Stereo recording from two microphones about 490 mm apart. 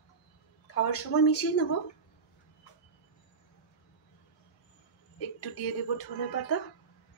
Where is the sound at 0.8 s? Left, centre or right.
Left.